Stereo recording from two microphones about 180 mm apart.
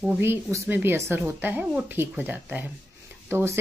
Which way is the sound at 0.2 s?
15° right (ahead or behind).